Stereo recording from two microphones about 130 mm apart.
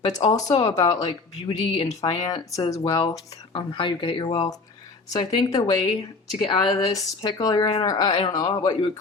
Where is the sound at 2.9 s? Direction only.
40° left (ahead or behind).